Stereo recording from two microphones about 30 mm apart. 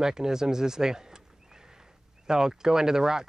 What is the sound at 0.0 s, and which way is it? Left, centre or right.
Speech, centre.